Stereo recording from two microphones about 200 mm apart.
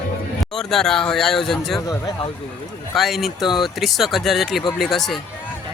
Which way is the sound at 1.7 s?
20° left (ahead or behind).